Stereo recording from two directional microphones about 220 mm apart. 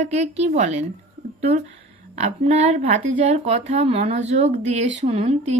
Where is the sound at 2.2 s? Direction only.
30° right (ahead or behind).